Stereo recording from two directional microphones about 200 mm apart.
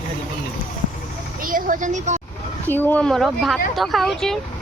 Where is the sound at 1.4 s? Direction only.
45° right (ahead or behind).